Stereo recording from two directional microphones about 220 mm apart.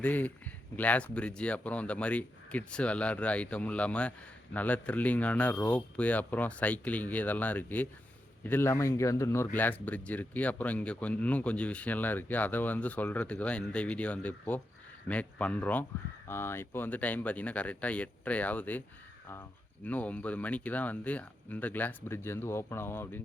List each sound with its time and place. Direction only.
0.0 s speech: 5° left (ahead or behind)